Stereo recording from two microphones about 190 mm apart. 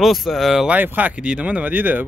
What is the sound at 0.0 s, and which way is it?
Speech, centre (ahead or behind).